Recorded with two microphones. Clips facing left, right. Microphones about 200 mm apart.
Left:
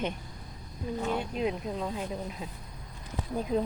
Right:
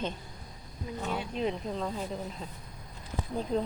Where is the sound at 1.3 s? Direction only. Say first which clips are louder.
Left 1 dB; 5° left (ahead or behind).